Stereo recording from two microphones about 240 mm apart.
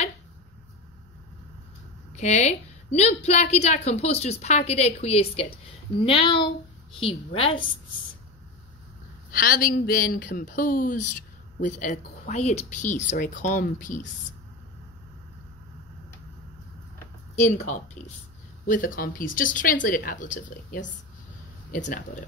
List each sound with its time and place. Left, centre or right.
2.1 s a woman's voice: left
9.3 s speech: left
17.6 s speech: left